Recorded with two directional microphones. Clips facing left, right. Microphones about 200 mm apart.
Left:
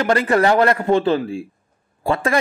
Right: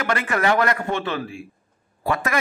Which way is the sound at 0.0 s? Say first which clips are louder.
Left 6 dB; 35° left (ahead or behind).